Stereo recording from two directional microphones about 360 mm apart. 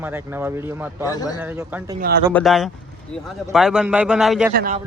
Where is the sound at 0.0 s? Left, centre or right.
Centre.